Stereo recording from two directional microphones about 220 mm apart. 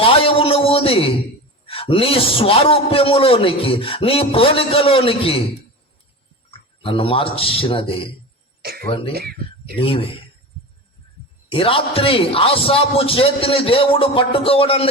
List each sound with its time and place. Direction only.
0.0 s a sound: 25° left (ahead or behind)
1.6 s a man's voice: 25° left (ahead or behind)
6.5 s a man's voice: 25° left (ahead or behind)
9.1 s speech: 45° right (ahead or behind)
9.7 s a man's voice: 25° left (ahead or behind)
11.5 s a man's voice: 25° left (ahead or behind)